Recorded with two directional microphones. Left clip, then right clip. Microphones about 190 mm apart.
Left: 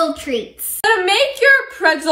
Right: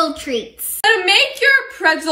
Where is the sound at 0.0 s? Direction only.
Centre (ahead or behind).